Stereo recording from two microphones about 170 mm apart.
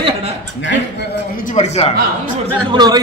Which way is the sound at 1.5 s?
40° left (ahead or behind).